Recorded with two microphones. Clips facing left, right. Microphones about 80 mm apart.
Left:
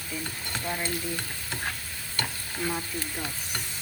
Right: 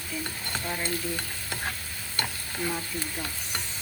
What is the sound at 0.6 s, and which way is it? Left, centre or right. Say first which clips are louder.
Frying: left 1 dB; centre.